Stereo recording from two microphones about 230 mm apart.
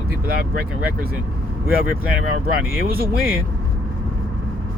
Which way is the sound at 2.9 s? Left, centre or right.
Right.